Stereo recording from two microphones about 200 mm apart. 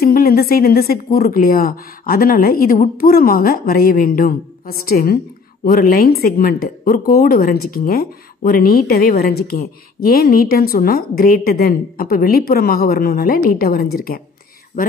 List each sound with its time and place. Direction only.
0.0 s a woman's voice: 50° left (ahead or behind)